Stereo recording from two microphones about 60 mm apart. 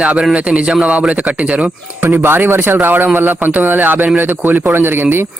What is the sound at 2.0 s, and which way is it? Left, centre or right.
A man's voice, right.